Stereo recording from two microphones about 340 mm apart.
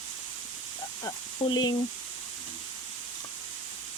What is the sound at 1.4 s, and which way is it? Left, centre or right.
Speech, centre.